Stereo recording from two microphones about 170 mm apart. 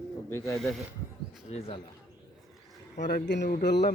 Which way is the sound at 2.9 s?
85° left.